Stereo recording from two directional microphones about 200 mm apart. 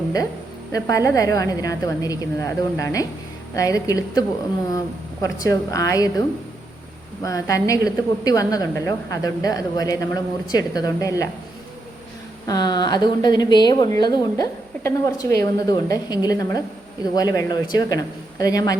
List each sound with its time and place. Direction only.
0.7 s a woman's voice: 15° left (ahead or behind)
5.2 s a woman's voice: 15° left (ahead or behind)
12.5 s a woman's voice: 20° left (ahead or behind)